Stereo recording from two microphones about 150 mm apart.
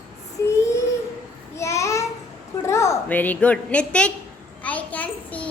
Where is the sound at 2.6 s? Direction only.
20° left (ahead or behind).